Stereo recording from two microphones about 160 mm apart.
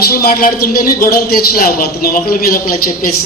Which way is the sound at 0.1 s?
70° left (ahead or behind).